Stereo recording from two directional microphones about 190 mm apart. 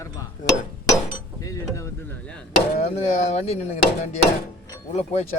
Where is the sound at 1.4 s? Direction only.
15° left (ahead or behind).